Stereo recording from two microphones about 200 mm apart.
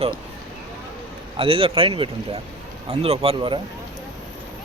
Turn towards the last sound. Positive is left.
turn(degrees=-25)  # may be behind; listen again after turning